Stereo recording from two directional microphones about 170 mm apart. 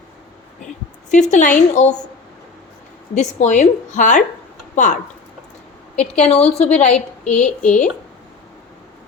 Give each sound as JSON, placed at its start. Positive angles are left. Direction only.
{"t": 1.1, "sound": "a woman's voice", "side_deg": 45}
{"t": 3.2, "sound": "a woman's voice", "side_deg": 45}
{"t": 6.0, "sound": "a woman's voice", "side_deg": 40}